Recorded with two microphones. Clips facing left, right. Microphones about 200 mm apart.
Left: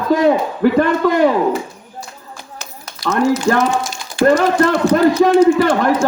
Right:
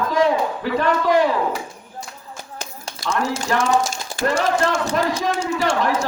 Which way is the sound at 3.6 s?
40° right (ahead or behind).